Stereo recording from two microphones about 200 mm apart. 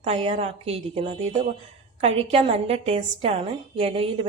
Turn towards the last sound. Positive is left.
turn(degrees=-30)  # may be behind; listen again after turning